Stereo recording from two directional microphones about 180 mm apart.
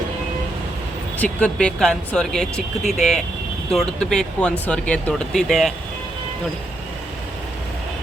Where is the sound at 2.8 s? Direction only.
40° left (ahead or behind).